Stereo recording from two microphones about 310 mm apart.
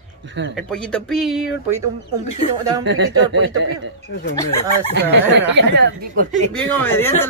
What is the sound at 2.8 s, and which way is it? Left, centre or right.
Speech, right.